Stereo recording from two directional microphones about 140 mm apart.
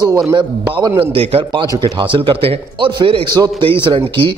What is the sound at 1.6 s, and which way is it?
A man's voice, 30° right (ahead or behind).